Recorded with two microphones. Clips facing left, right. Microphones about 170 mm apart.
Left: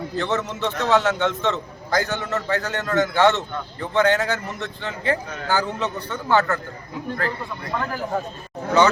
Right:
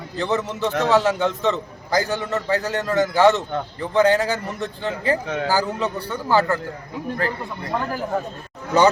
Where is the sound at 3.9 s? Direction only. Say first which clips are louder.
Right 2 dB; 35° right (ahead or behind).